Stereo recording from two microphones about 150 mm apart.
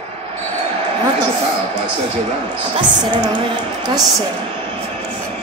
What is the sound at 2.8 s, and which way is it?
A woman's voice, 30° right (ahead or behind).